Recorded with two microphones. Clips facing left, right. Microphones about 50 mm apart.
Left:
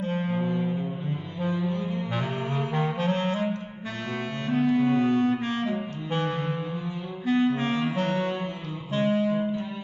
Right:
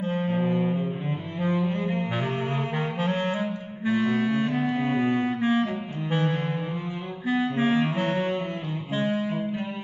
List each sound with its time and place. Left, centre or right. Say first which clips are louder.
0.3 s music: right 2 dB; right
1.5 s cello: right 3 dB; right
2.5 s saxophone: left 1 dB; centre
4.6 s clarinet: left 2 dB; centre
6.1 s music: right 2 dB; centre
7.2 s clarinet: even; centre
7.9 s music: right 1 dB; centre